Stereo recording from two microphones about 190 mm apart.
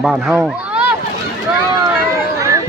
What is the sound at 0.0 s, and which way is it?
Speech, 5° right (ahead or behind).